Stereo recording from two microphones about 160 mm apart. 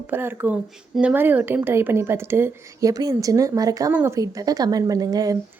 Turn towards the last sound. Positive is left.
turn(degrees=-25)  # may be behind; listen again after turning